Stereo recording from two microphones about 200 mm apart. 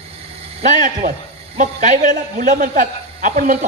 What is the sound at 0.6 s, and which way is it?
A man's voice, 40° right (ahead or behind).